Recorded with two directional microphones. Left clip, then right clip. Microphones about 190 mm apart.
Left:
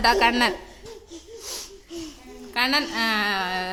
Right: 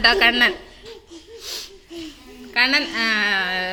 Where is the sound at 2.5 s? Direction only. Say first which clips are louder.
Right 4 dB; 5° left (ahead or behind).